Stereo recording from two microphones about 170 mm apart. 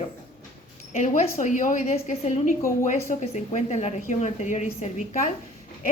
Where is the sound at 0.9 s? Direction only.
40° left (ahead or behind).